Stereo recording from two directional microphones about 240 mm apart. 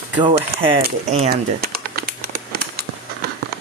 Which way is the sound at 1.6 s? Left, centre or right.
Right.